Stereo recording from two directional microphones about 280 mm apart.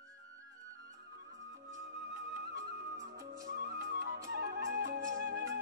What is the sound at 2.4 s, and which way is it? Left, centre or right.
Music, right.